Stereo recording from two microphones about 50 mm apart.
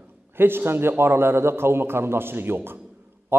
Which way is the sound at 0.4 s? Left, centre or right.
Right.